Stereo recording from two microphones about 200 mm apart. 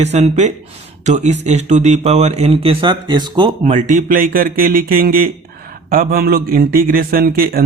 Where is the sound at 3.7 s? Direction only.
40° right (ahead or behind).